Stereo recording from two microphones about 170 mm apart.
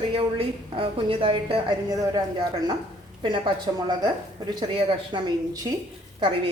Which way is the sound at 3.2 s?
30° right (ahead or behind).